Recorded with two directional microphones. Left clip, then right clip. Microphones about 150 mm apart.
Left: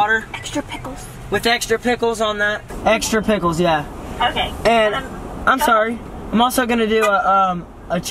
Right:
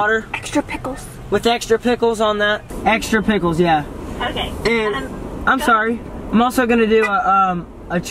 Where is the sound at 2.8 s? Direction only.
25° left (ahead or behind).